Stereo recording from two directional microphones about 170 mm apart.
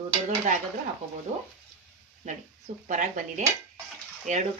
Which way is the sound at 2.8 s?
50° right (ahead or behind).